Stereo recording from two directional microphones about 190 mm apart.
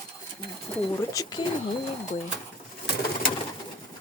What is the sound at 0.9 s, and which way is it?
Speech, 20° left (ahead or behind).